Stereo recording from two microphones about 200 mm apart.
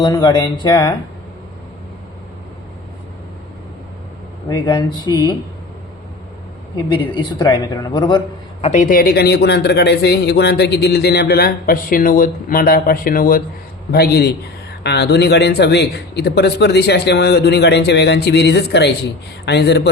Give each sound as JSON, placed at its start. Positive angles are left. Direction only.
{"t": 0.0, "sound": "speech", "side_deg": 20}
{"t": 4.4, "sound": "speech", "side_deg": 20}
{"t": 6.7, "sound": "speech", "side_deg": 25}
{"t": 8.6, "sound": "a man's voice", "side_deg": 35}